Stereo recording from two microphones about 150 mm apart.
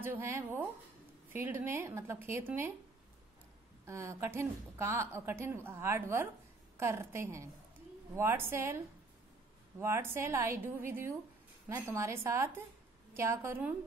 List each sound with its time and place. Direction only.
0.0 s a woman's voice: 15° right (ahead or behind)
3.8 s a woman's voice: 20° right (ahead or behind)